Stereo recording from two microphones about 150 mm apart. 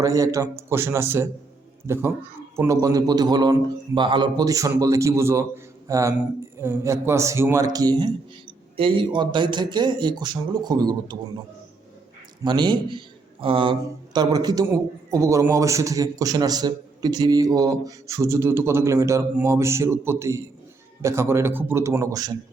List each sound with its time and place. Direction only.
0.0 s a man's voice: 20° right (ahead or behind)
12.5 s a man's voice: 30° right (ahead or behind)